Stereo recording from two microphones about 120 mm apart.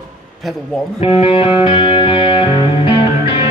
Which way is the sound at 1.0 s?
50° left (ahead or behind).